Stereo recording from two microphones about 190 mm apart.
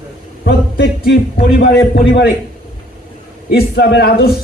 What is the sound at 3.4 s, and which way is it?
Speech, 60° left (ahead or behind).